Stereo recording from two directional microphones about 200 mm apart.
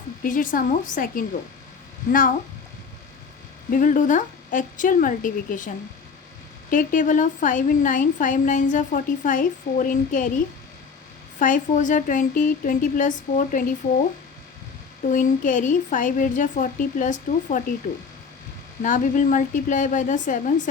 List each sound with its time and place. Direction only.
0.2 s speech: 45° left (ahead or behind)
3.7 s a woman's voice: 40° left (ahead or behind)
11.3 s a woman's voice: 40° left (ahead or behind)
15.1 s a woman's voice: 40° left (ahead or behind)
18.8 s a woman's voice: 40° left (ahead or behind)